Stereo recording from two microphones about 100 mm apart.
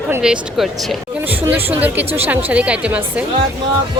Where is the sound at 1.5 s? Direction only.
20° right (ahead or behind).